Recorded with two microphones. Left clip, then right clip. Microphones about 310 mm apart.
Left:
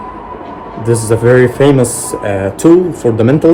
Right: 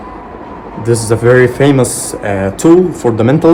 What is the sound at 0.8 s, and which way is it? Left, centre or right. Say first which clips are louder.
Speech: even; centre.